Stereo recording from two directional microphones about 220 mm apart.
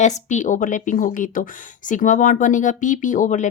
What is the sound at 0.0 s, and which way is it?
Speech, 35° left (ahead or behind).